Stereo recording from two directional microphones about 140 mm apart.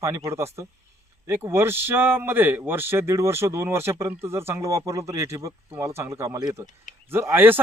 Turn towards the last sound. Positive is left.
turn(degrees=-15)  # may be behind; listen again after turning